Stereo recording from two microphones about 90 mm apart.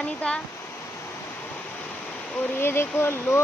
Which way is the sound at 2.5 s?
25° left (ahead or behind).